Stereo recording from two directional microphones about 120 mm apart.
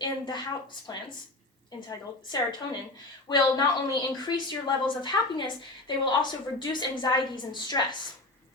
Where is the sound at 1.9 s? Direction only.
35° left (ahead or behind).